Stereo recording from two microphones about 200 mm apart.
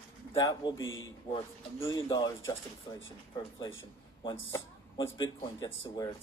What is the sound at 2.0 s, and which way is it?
Speech, 20° left (ahead or behind).